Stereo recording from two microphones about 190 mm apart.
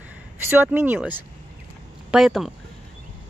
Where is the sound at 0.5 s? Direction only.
10° right (ahead or behind).